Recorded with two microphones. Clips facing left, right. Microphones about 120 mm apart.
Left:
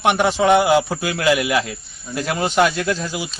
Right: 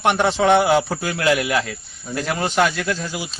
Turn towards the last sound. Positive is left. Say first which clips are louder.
# left 2 dB
turn(degrees=20)  # may be behind; listen again after turning